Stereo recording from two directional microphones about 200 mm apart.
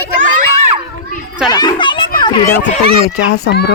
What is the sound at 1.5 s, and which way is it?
A child's voice, 20° left (ahead or behind).